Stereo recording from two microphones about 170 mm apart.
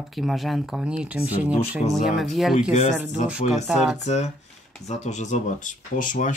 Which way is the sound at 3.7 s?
Centre (ahead or behind).